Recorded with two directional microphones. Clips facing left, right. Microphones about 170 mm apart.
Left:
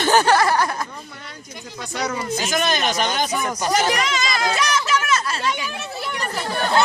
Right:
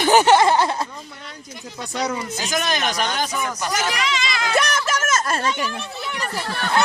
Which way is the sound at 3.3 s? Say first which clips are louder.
Left 4 dB; 35° left (ahead or behind).